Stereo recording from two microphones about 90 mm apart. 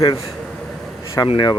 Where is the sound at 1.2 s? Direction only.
40° left (ahead or behind).